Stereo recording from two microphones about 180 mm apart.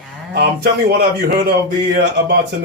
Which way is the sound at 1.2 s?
60° right (ahead or behind).